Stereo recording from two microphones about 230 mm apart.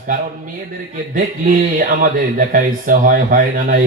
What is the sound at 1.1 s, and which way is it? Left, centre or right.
Speech, right.